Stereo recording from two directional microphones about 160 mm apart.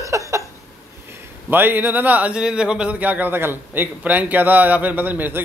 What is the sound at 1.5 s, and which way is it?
Speech, 10° right (ahead or behind).